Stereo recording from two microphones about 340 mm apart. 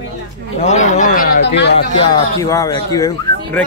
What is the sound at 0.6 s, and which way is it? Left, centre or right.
A man's voice, centre.